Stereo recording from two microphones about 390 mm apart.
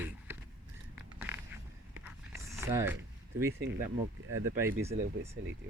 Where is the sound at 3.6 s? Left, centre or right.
Right.